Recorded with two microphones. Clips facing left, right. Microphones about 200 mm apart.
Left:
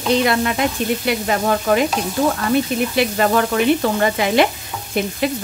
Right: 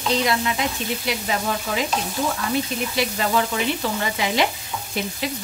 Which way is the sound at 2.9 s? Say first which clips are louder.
Left 5 dB; 55° left (ahead or behind).